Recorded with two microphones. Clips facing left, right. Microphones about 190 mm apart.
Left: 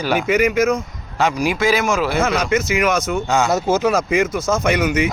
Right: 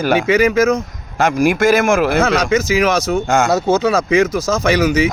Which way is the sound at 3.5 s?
70° right (ahead or behind).